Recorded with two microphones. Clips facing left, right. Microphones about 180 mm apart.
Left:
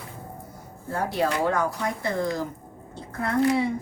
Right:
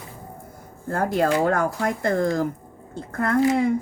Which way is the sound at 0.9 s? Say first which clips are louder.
Right 4 dB; 50° right (ahead or behind).